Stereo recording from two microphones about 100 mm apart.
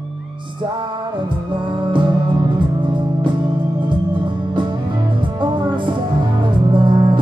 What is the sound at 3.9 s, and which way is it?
Music, 55° right (ahead or behind).